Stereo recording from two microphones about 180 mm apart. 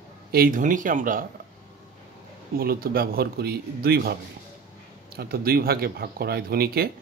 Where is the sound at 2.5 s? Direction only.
55° right (ahead or behind).